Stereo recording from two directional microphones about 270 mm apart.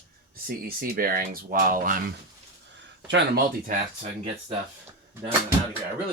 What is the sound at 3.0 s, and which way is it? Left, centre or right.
Speech, right.